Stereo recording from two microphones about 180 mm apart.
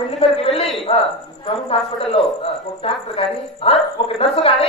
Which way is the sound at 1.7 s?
30° left (ahead or behind).